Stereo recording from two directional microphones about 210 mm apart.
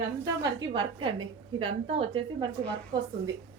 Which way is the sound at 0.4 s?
20° right (ahead or behind).